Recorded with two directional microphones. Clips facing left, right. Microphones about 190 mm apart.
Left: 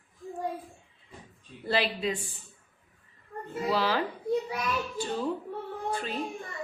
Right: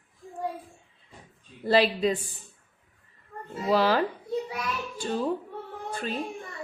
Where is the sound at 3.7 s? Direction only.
45° right (ahead or behind).